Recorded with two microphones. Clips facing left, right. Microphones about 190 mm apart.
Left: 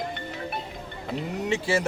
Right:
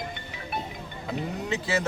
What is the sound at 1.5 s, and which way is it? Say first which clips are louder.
Speech: left 3 dB; 30° left (ahead or behind).